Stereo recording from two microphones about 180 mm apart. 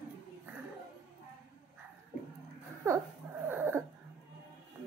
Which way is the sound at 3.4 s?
10° right (ahead or behind).